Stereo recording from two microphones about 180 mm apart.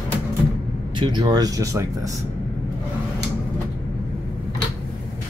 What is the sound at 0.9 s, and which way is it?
Speech, 25° right (ahead or behind).